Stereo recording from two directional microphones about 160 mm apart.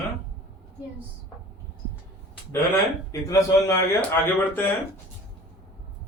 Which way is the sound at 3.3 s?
20° left (ahead or behind).